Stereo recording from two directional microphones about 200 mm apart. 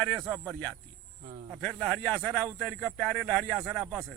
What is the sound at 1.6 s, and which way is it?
Speech, 5° left (ahead or behind).